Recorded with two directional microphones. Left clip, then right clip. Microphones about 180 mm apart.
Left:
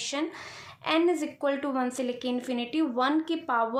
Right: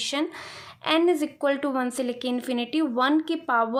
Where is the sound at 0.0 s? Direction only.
35° right (ahead or behind).